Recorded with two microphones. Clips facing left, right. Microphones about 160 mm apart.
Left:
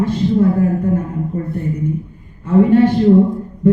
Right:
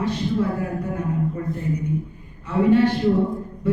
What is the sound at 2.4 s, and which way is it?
Music, 50° left (ahead or behind).